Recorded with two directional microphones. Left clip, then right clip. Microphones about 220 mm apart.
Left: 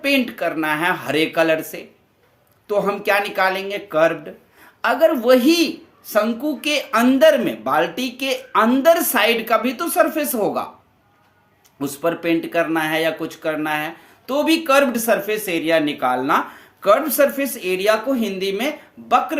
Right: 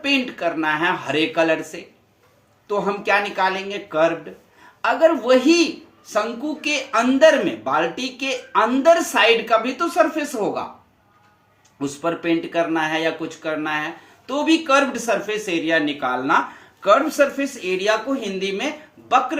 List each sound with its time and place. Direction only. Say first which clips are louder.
0.0 s speech: left 2 dB; 50° left (ahead or behind)
11.8 s speech: left 2 dB; 50° left (ahead or behind)